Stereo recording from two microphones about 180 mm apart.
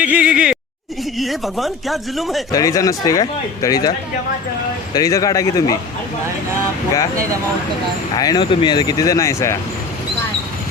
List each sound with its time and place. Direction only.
0.0 s a sound: 5° right (ahead or behind)
1.2 s speech: centre (ahead or behind)
2.5 s speech: 20° left (ahead or behind)
4.9 s speech: 20° left (ahead or behind)
8.1 s speech: 20° left (ahead or behind)